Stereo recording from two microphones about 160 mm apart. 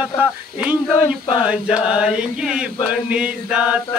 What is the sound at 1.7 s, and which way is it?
Chant, 5° right (ahead or behind).